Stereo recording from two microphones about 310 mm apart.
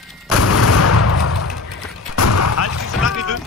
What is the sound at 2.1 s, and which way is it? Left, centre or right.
Artillery fire, left.